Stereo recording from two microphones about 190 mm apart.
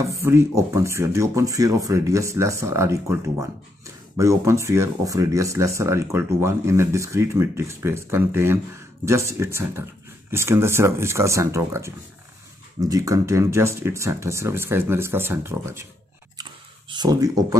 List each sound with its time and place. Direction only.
0.1 s speech: 15° right (ahead or behind)
16.9 s speech: 20° right (ahead or behind)